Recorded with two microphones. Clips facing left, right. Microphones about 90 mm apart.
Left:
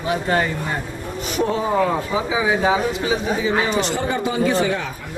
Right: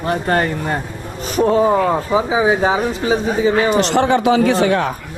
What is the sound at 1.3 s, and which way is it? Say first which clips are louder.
Speech: right 6 dB; 40° right (ahead or behind).